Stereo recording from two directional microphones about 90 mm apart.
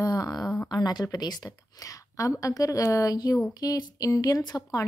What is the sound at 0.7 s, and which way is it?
Speech, 50° left (ahead or behind).